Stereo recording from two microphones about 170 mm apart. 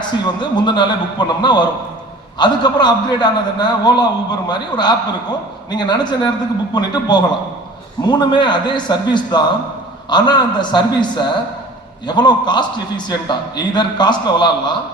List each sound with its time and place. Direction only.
0.1 s a man's voice: 25° left (ahead or behind)